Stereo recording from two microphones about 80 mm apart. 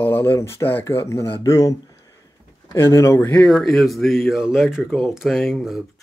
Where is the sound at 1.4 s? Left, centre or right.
Left.